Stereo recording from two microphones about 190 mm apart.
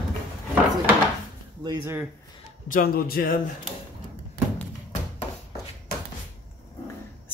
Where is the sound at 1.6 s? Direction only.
20° right (ahead or behind).